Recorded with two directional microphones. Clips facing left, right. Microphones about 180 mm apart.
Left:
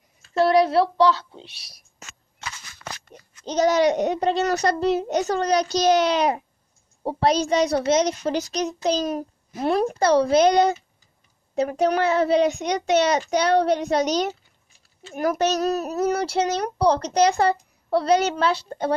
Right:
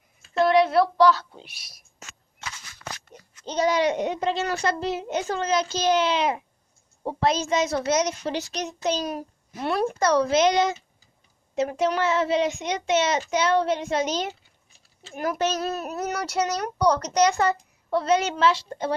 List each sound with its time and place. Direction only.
0.3 s a woman's voice: 35° left (ahead or behind)
3.5 s a child's voice: 40° left (ahead or behind); by 8.1 s 25° left (ahead or behind)
8.3 s a child's voice: 40° left (ahead or behind)